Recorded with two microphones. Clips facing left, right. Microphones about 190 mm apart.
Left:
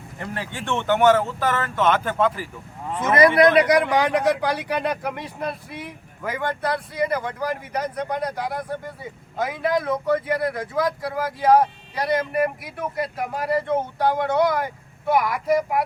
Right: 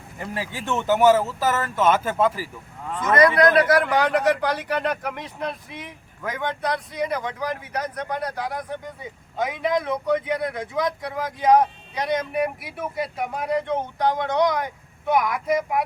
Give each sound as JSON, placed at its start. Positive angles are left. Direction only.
{"t": 0.2, "sound": "speech", "side_deg": -5}
{"t": 3.2, "sound": "a man's voice", "side_deg": 25}
{"t": 3.6, "sound": "speech", "side_deg": 15}